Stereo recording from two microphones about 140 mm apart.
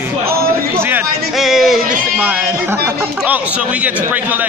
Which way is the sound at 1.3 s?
Centre (ahead or behind).